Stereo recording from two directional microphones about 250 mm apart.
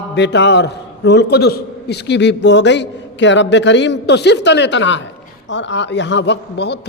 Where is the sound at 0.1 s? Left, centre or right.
Left.